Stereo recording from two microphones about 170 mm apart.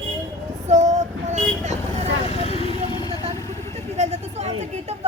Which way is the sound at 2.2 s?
40° left (ahead or behind).